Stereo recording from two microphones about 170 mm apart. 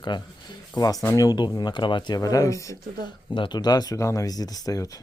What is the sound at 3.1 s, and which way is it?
Speech, 25° left (ahead or behind).